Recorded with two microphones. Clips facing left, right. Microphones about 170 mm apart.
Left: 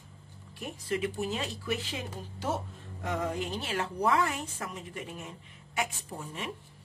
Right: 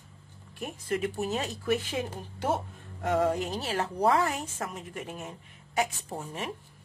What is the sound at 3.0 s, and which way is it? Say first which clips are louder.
A woman's voice: right 6 dB; 45° right (ahead or behind).